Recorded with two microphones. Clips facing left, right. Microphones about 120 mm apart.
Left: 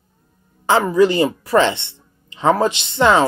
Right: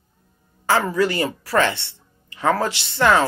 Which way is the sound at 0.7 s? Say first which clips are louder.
Left 5 dB; 20° left (ahead or behind).